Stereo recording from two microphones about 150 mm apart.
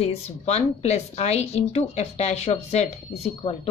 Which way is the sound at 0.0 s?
45° left (ahead or behind).